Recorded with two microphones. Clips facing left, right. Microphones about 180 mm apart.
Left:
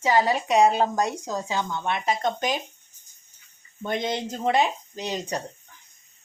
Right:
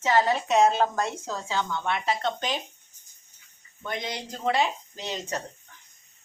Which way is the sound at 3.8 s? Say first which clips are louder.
Left 6 dB; 25° left (ahead or behind).